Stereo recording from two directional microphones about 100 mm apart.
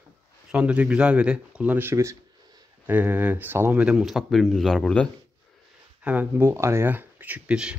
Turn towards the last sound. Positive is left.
turn(degrees=-10)  # may be behind; listen again after turning